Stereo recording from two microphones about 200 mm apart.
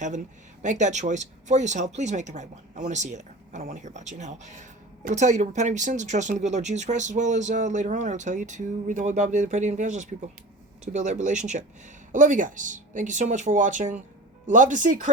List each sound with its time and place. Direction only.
0.6 s speech: 35° right (ahead or behind)